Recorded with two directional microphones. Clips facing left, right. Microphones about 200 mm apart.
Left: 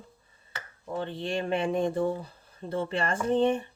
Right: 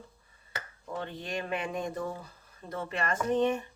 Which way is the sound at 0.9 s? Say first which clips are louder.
Left 5 dB; 30° left (ahead or behind).